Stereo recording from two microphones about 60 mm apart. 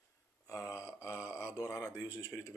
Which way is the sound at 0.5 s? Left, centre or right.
Left.